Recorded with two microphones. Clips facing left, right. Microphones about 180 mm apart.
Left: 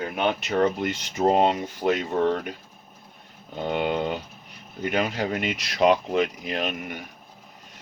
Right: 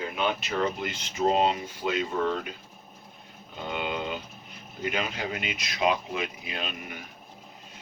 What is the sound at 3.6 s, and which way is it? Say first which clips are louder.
Speech: left 7 dB; 55° left (ahead or behind).